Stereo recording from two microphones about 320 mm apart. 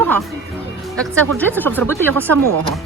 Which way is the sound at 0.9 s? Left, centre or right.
Centre.